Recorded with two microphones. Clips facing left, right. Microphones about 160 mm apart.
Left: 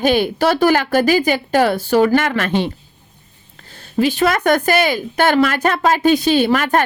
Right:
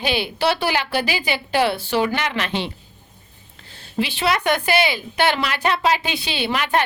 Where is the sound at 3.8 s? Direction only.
45° left (ahead or behind).